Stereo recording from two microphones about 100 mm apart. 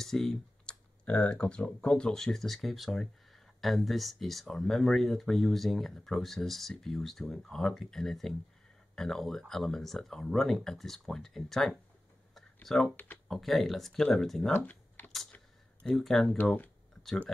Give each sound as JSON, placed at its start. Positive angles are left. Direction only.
{"t": 0.0, "sound": "speech", "side_deg": 5}
{"t": 14.5, "sound": "typing", "side_deg": 15}
{"t": 15.9, "sound": "speech", "side_deg": 5}